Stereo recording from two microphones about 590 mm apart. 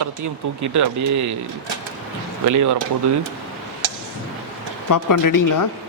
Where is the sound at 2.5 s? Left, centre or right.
Right.